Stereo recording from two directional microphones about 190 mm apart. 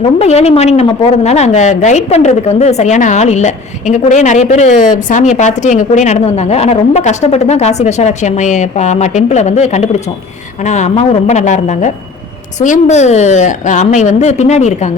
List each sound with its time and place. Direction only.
0.0 s a woman's voice: 35° left (ahead or behind)